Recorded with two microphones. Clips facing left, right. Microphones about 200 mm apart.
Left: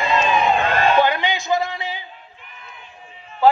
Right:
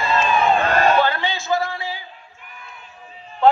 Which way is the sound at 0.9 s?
15° left (ahead or behind).